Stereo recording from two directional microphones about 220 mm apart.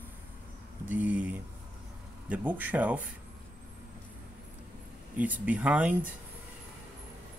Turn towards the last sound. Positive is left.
turn(degrees=-5)  # may be behind; listen again after turning